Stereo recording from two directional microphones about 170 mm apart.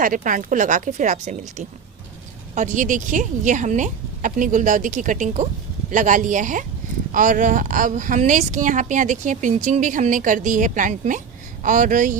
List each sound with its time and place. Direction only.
0.0 s speech: 50° right (ahead or behind)